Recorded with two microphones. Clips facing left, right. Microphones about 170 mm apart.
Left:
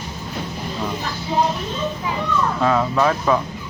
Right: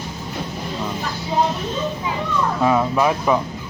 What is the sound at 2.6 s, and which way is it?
Speech, 15° right (ahead or behind).